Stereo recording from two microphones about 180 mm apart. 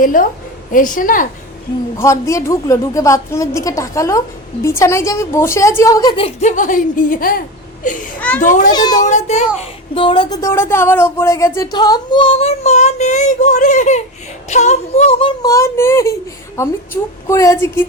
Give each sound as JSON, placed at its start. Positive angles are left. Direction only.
{"t": 0.0, "sound": "a woman's voice", "side_deg": 50}
{"t": 2.0, "sound": "a woman's voice", "side_deg": 15}
{"t": 6.6, "sound": "a woman's voice", "side_deg": 45}
{"t": 8.7, "sound": "speech", "side_deg": 25}
{"t": 9.0, "sound": "speech", "side_deg": 40}
{"t": 9.6, "sound": "speech", "side_deg": 30}
{"t": 10.4, "sound": "speech", "side_deg": 15}
{"t": 15.4, "sound": "a woman's voice", "side_deg": 15}